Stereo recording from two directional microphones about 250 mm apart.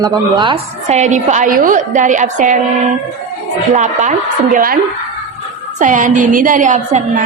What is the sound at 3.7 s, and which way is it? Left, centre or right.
A woman's voice, right.